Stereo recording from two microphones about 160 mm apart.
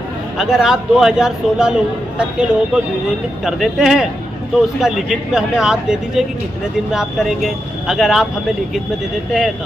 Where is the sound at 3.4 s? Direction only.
Centre (ahead or behind).